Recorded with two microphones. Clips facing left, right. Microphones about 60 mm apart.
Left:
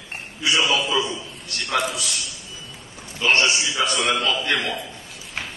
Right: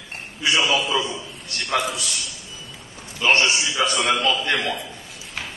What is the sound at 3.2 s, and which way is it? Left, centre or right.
Speech, right.